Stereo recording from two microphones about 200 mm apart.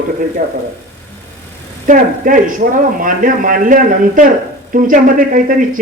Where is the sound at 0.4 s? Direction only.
40° right (ahead or behind).